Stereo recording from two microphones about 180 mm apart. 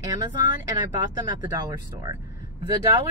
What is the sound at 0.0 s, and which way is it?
Speech, 20° right (ahead or behind).